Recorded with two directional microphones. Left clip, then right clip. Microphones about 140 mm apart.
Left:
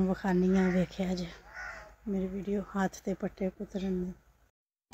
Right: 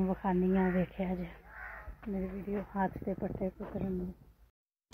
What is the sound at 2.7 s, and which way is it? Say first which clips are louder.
Speech: left 1 dB; 40° left (ahead or behind).